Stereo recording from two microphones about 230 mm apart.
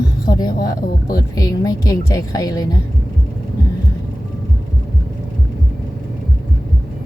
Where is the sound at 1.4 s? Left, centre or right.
Centre.